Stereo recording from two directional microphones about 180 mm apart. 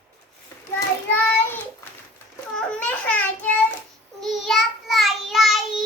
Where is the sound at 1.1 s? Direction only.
10° left (ahead or behind).